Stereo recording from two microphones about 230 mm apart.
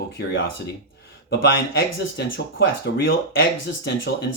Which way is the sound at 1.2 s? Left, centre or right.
Left.